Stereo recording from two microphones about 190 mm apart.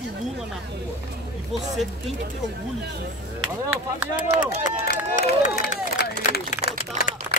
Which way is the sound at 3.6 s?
10° right (ahead or behind).